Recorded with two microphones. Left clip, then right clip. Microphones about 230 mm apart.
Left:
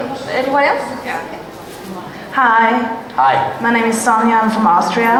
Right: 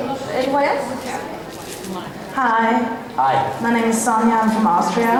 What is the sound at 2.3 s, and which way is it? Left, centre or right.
Speech, centre.